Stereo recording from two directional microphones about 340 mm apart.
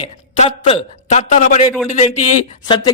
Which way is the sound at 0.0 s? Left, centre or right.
Centre.